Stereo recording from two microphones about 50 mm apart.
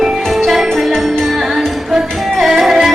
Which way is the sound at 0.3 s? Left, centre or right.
Centre.